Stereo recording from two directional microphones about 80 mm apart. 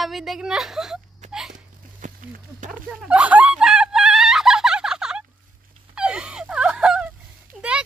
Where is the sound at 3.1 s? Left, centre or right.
Centre.